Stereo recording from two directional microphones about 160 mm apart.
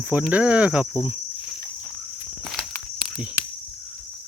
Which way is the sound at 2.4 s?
Centre (ahead or behind).